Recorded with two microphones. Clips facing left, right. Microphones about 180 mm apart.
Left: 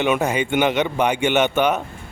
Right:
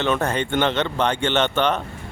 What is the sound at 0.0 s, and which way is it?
Speech, 10° left (ahead or behind).